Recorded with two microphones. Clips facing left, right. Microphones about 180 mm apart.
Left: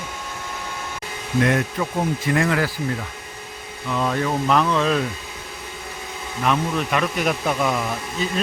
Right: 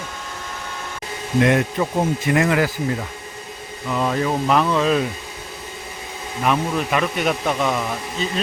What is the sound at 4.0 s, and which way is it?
Speech, 5° right (ahead or behind).